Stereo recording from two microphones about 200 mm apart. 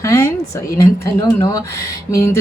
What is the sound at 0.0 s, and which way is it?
A woman's voice, 15° left (ahead or behind).